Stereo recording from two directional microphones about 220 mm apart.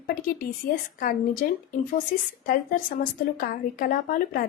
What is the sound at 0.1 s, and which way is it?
Speech, 40° left (ahead or behind).